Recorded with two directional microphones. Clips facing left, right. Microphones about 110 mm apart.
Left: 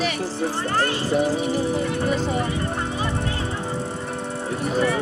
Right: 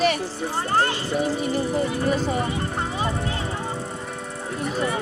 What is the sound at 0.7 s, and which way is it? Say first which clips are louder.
Vehicle: right 3 dB; 25° right (ahead or behind).